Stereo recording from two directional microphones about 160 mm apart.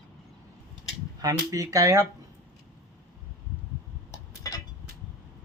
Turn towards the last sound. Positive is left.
turn(degrees=20)  # may be behind; listen again after turning